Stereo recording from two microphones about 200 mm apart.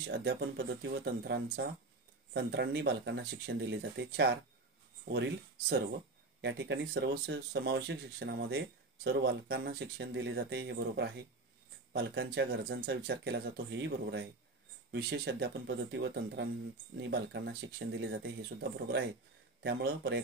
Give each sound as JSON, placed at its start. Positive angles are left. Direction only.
{"t": 0.1, "sound": "speech", "side_deg": -65}